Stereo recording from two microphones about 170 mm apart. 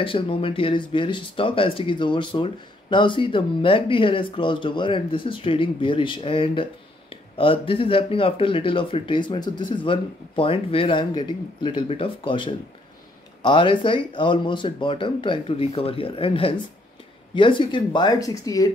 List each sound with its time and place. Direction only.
0.0 s speech: 30° left (ahead or behind)